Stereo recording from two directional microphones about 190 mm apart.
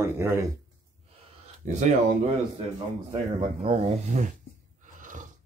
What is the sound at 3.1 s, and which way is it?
Speech, 30° right (ahead or behind).